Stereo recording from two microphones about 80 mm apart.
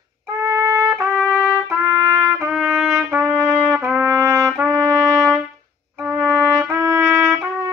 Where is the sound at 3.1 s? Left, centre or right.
Right.